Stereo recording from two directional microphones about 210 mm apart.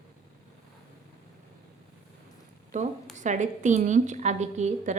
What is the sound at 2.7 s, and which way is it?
A woman's voice, 35° right (ahead or behind).